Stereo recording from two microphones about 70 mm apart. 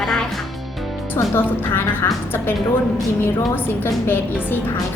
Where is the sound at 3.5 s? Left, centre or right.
Left.